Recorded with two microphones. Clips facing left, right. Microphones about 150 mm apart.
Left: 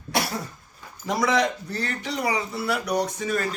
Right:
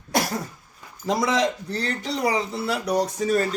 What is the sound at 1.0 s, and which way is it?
A man's voice, 30° right (ahead or behind).